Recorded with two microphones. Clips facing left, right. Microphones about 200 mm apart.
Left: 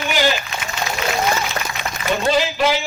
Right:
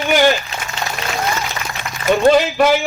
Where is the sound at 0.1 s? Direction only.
50° right (ahead or behind).